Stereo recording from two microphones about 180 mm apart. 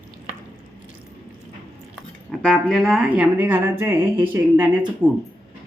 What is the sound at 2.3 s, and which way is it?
Speech, 5° left (ahead or behind).